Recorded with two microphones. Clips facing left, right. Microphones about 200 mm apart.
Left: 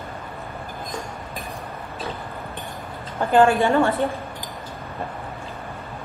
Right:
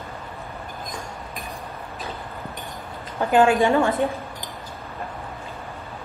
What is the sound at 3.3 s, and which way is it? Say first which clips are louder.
Speech: left 1 dB; 15° right (ahead or behind).